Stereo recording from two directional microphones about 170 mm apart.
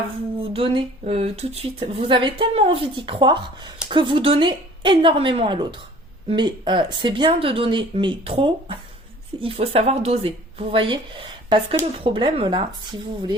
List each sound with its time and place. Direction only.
0.5 s speech: 30° right (ahead or behind)